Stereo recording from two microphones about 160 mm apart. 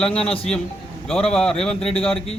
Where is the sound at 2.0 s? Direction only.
40° left (ahead or behind).